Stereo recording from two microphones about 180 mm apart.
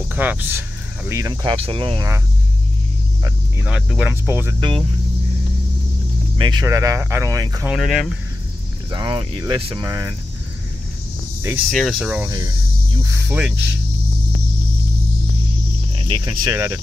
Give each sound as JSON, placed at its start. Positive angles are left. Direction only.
{"t": 0.1, "sound": "speech", "side_deg": -10}
{"t": 3.6, "sound": "speech", "side_deg": -5}
{"t": 4.6, "sound": "speech", "side_deg": -25}
{"t": 6.3, "sound": "speech", "side_deg": -25}
{"t": 7.7, "sound": "speech", "side_deg": 0}
{"t": 8.9, "sound": "speech", "side_deg": -25}
{"t": 9.8, "sound": "speech", "side_deg": -20}
{"t": 11.7, "sound": "speech", "side_deg": 0}
{"t": 12.1, "sound": "speech", "side_deg": -10}
{"t": 12.4, "sound": "snake", "side_deg": -20}
{"t": 16.0, "sound": "speech", "side_deg": -25}